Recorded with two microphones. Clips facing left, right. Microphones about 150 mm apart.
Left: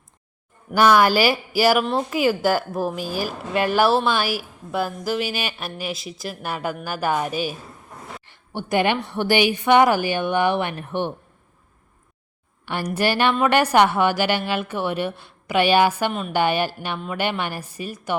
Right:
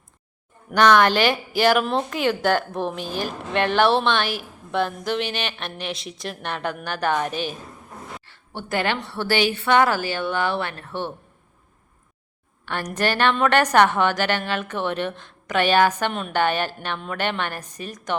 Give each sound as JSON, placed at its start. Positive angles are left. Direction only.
{"t": 0.7, "sound": "a woman's voice", "side_deg": 5}
{"t": 12.6, "sound": "a woman's voice", "side_deg": 10}